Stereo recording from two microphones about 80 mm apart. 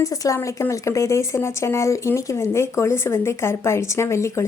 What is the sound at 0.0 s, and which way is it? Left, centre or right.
A woman's voice, left.